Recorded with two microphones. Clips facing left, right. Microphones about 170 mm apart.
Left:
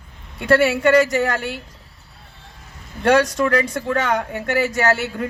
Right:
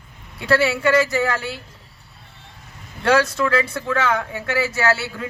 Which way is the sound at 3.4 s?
45° left (ahead or behind).